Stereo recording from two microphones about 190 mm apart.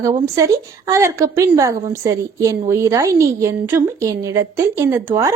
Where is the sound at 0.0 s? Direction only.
15° right (ahead or behind).